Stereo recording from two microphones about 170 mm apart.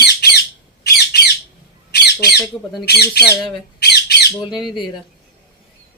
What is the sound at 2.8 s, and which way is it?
Speech, 70° left (ahead or behind).